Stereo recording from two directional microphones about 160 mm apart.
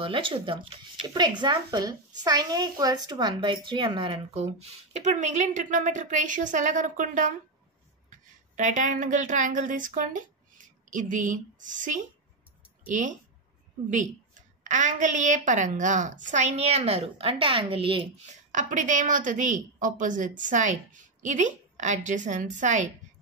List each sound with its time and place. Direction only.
0.0 s speech: 35° right (ahead or behind); by 7.3 s 55° right (ahead or behind)
8.5 s a woman's voice: 50° right (ahead or behind)
18.5 s a woman's voice: 50° right (ahead or behind)